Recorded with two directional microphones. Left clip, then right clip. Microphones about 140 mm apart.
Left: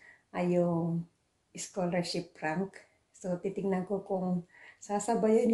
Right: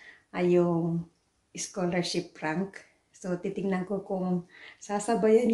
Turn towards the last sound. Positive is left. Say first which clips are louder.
# right 4 dB
turn(degrees=20)  # may be behind; listen again after turning